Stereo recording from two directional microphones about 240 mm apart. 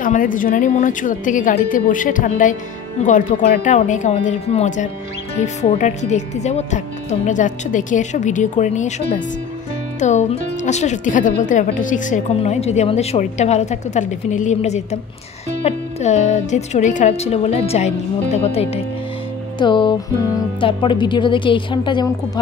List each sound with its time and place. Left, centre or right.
0.0 s a woman's voice: left; by 22.4 s centre